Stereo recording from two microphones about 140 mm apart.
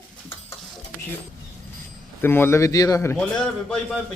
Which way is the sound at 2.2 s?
15° left (ahead or behind).